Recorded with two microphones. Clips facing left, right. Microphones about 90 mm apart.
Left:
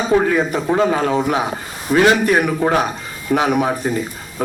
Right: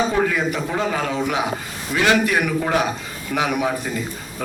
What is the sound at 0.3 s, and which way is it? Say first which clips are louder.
A man's voice: left 5 dB; 35° left (ahead or behind).